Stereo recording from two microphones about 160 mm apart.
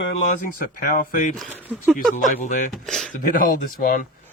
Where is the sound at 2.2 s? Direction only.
55° left (ahead or behind).